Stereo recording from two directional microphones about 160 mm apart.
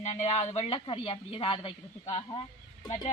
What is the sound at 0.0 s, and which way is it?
Speech, 45° left (ahead or behind).